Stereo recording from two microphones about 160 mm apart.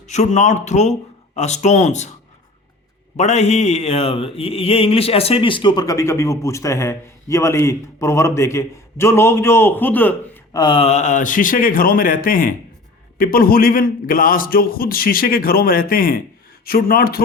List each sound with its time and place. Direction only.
0.1 s speech: 45° left (ahead or behind)
3.2 s mantra: 45° left (ahead or behind); by 10.2 s 10° left (ahead or behind)
10.5 s a man's voice: 30° left (ahead or behind); by 17.2 s 65° left (ahead or behind)